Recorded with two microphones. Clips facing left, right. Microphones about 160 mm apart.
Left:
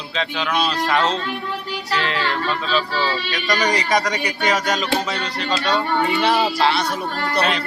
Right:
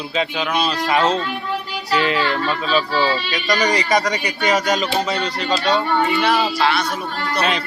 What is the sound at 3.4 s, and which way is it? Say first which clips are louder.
A man's voice: right 2 dB; centre (ahead or behind).